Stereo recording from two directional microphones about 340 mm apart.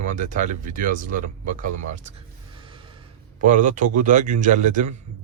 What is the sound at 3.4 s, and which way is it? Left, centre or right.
Speech, right.